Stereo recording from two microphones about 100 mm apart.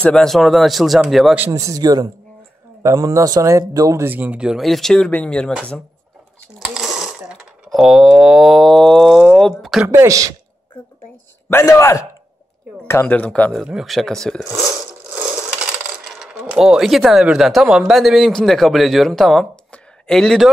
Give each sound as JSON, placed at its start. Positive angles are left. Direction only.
{"t": 0.0, "sound": "speech", "side_deg": 5}
{"t": 1.5, "sound": "a man's voice", "side_deg": -35}
{"t": 6.6, "sound": "a sound", "side_deg": -5}
{"t": 9.8, "sound": "a man's voice", "side_deg": -35}
{"t": 11.5, "sound": "a man's voice", "side_deg": 30}
{"t": 12.8, "sound": "a sound", "side_deg": 30}
{"t": 13.1, "sound": "speech", "side_deg": 15}
{"t": 15.8, "sound": "speech", "side_deg": -5}
{"t": 19.7, "sound": "a sound", "side_deg": 5}